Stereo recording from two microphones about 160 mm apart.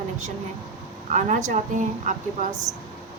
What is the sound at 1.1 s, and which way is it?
Speech, 50° right (ahead or behind).